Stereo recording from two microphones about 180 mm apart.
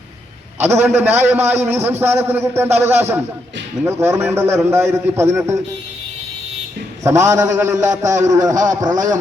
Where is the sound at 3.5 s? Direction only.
85° right.